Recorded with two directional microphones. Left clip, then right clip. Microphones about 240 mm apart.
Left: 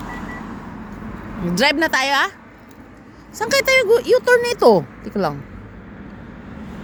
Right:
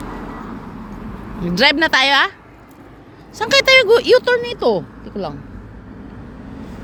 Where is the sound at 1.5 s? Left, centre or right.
Centre.